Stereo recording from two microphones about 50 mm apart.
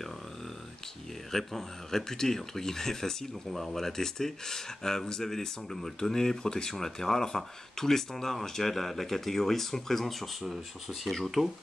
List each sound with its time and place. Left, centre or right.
1.3 s speech: centre